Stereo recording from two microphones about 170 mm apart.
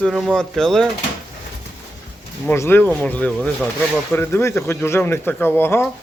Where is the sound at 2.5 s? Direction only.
10° left (ahead or behind).